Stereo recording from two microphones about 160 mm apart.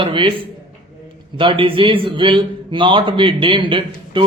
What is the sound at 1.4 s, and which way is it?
Speech, 30° right (ahead or behind).